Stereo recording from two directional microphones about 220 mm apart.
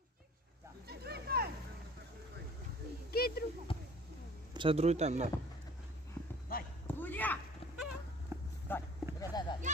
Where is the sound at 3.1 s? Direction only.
45° left (ahead or behind).